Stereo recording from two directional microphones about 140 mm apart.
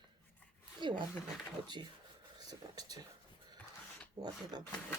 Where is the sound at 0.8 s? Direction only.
35° right (ahead or behind).